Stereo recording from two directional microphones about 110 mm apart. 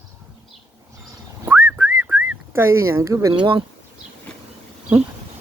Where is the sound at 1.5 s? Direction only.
20° right (ahead or behind).